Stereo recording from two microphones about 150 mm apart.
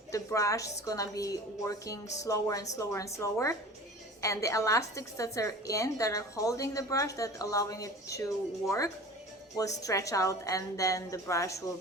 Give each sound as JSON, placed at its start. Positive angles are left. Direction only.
{"t": 0.1, "sound": "a woman's voice", "side_deg": 20}
{"t": 9.6, "sound": "a woman's voice", "side_deg": 20}